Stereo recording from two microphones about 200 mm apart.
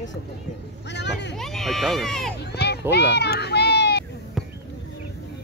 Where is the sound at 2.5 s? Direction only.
55° left (ahead or behind).